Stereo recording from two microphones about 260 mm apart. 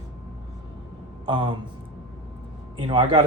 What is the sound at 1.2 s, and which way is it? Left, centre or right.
Speech, centre.